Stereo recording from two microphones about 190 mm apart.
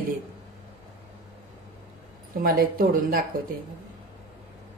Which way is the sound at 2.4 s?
50° right (ahead or behind).